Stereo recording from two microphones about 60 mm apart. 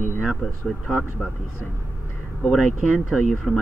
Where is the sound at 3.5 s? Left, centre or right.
Centre.